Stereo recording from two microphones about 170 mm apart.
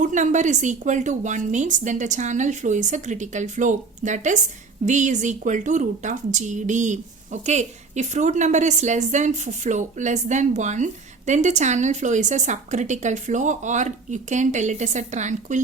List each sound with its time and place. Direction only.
0.0 s a woman's voice: 45° right (ahead or behind)